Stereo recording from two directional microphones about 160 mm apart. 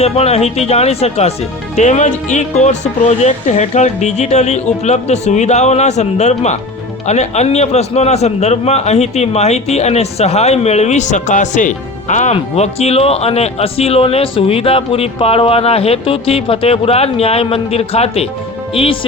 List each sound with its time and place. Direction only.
0.0 s a man's voice: 40° left (ahead or behind)